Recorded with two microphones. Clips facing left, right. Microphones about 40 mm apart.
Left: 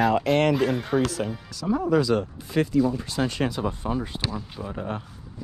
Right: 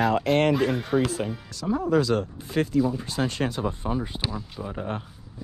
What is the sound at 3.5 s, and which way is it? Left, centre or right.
Speech, left.